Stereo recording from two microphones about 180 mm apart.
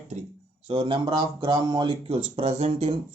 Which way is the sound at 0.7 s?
30° right (ahead or behind).